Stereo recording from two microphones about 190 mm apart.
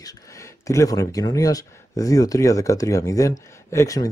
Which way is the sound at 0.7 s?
20° left (ahead or behind).